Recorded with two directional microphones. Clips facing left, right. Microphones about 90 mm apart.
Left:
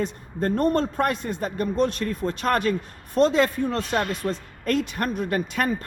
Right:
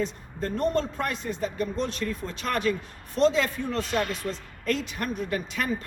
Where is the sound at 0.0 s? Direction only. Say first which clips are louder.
Left 4 dB; 55° left (ahead or behind).